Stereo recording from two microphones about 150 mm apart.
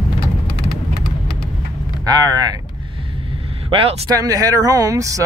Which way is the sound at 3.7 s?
40° right (ahead or behind).